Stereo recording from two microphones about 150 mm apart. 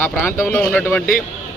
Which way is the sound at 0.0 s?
15° left (ahead or behind).